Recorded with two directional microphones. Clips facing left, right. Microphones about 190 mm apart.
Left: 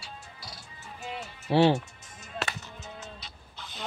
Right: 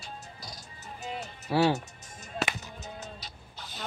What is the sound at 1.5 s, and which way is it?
Speech, 25° left (ahead or behind).